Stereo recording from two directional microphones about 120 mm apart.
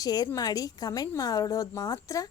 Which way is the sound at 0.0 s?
35° left (ahead or behind).